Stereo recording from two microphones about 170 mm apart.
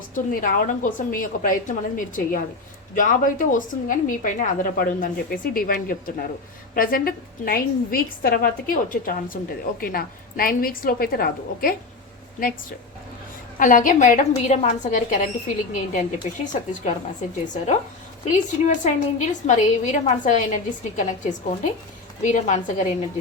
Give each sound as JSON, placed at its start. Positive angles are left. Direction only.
{"t": 0.1, "sound": "a woman's voice", "side_deg": 50}
{"t": 13.6, "sound": "a woman's voice", "side_deg": 50}